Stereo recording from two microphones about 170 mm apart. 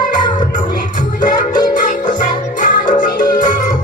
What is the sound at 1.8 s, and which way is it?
Music, 45° left (ahead or behind).